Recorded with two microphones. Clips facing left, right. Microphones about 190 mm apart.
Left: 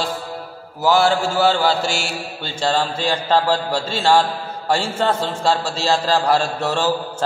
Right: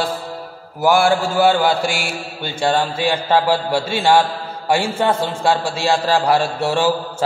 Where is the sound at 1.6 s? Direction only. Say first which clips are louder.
Right 1 dB; 55° right (ahead or behind).